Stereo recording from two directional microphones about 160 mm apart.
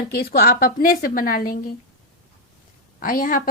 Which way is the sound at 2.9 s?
60° left (ahead or behind).